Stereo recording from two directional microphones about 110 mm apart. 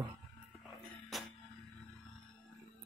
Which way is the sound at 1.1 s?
Centre (ahead or behind).